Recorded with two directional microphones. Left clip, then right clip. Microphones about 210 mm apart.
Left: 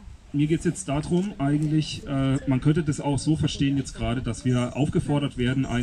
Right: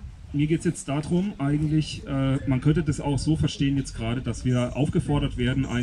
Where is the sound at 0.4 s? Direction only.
5° right (ahead or behind).